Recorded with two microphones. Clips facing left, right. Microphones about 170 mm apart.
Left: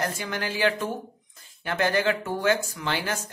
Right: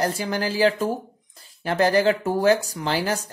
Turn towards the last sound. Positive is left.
turn(degrees=-35)  # may be behind; listen again after turning